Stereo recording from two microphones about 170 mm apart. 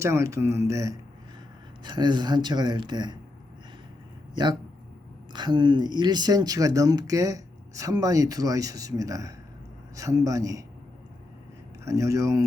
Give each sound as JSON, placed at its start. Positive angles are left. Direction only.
{"t": 0.0, "sound": "speech", "side_deg": -15}
{"t": 5.3, "sound": "speech", "side_deg": -25}
{"t": 11.9, "sound": "speech", "side_deg": -20}